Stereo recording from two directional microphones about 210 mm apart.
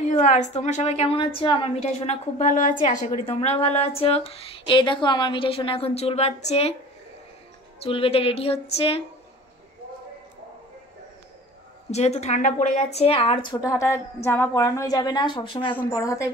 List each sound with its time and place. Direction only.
0.0 s a woman's voice: 35° left (ahead or behind)
7.8 s a woman's voice: 25° left (ahead or behind)
11.9 s a woman's voice: 30° left (ahead or behind); by 16.3 s 15° left (ahead or behind)